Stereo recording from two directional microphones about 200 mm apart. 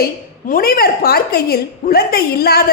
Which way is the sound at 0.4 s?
45° left (ahead or behind).